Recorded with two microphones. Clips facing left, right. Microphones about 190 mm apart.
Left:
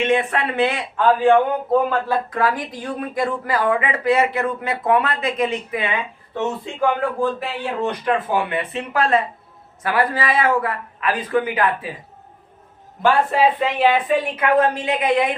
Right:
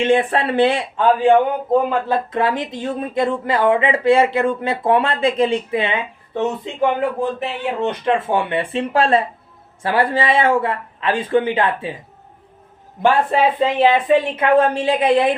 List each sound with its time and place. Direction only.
0.0 s a woman's voice: 30° right (ahead or behind)
1.2 s speech: 15° right (ahead or behind)
13.6 s a woman's voice: 25° right (ahead or behind)